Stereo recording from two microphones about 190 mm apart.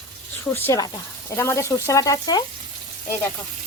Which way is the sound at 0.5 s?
15° left (ahead or behind).